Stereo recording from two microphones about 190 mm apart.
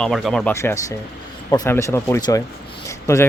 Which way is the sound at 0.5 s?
15° left (ahead or behind).